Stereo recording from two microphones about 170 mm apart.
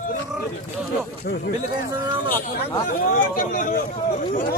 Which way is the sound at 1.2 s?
70° left (ahead or behind).